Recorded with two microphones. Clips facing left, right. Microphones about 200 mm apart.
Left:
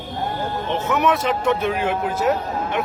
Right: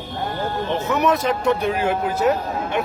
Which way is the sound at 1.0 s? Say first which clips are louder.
Right 1 dB; 40° right (ahead or behind).